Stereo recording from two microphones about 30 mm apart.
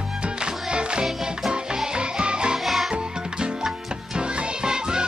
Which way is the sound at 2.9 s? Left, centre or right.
Right.